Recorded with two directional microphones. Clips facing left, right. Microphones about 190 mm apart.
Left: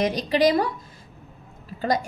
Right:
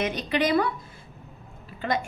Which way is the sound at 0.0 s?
35° left (ahead or behind).